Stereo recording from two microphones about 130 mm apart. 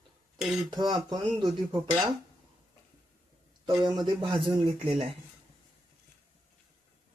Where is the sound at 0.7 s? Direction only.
30° right (ahead or behind).